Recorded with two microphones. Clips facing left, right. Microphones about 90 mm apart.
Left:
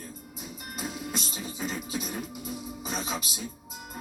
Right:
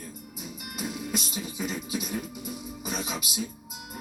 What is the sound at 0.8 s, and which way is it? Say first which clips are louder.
Music: right 2 dB; 35° left (ahead or behind).